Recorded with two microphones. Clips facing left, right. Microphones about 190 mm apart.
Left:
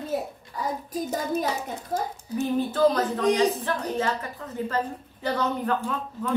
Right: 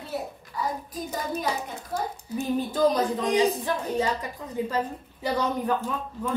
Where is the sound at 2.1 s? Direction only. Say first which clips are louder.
Left 2 dB; 15° right (ahead or behind).